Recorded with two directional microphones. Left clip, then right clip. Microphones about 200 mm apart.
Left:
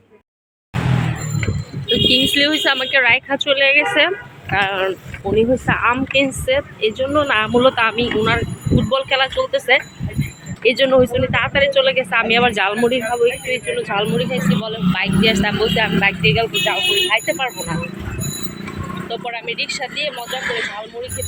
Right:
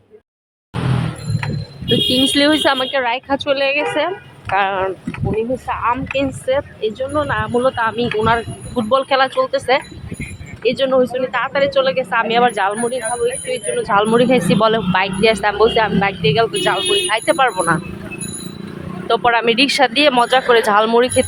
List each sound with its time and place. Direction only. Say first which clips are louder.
2.0 s speech: even; 10° right (ahead or behind)
5.4 s speech: left 4 dB; 5° left (ahead or behind)
13.7 s speech: right 5 dB; 10° right (ahead or behind)
14.0 s speech: right 6 dB; 30° right (ahead or behind)
14.9 s speech: right 2 dB; 25° right (ahead or behind)
19.0 s speech: right 12 dB; 35° right (ahead or behind)